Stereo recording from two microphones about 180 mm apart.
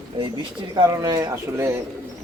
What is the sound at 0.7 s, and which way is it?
Speech, 20° right (ahead or behind).